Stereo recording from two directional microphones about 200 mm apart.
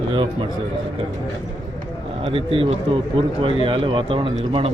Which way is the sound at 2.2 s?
30° right (ahead or behind).